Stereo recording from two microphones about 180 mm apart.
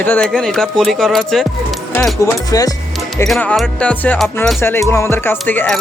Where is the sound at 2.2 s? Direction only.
20° left (ahead or behind).